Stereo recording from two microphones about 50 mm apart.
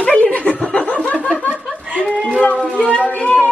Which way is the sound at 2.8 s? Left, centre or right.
Left.